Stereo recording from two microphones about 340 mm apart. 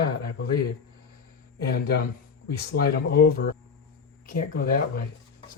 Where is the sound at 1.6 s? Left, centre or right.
Left.